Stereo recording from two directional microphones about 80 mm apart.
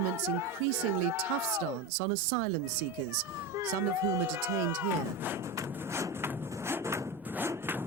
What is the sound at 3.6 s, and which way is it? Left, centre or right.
Speech, right.